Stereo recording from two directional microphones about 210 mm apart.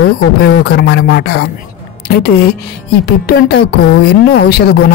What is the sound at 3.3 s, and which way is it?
Speech, 50° left (ahead or behind).